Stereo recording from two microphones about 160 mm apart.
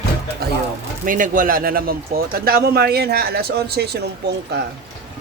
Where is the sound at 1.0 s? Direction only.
60° right (ahead or behind); by 4.3 s 90° right.